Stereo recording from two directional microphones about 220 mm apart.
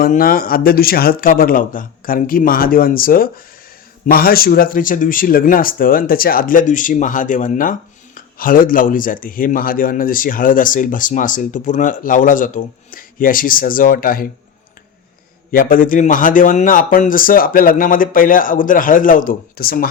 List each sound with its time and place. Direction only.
0.0 s speech: 40° left (ahead or behind)
15.5 s speech: 40° left (ahead or behind)